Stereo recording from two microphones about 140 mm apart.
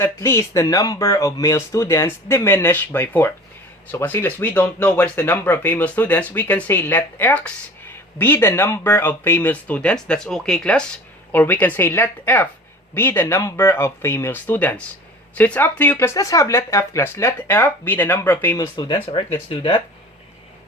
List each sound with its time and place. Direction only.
0.0 s speech: 20° left (ahead or behind)
18.5 s speech: 30° left (ahead or behind)
19.5 s speech: 40° left (ahead or behind)